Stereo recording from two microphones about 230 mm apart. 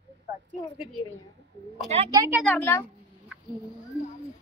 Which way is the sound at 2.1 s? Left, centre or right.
Centre.